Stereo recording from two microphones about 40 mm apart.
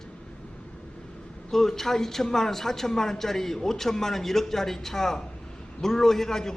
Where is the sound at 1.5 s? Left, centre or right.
Centre.